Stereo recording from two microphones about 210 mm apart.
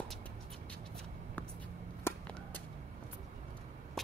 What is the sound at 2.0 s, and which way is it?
Whip, 5° left (ahead or behind).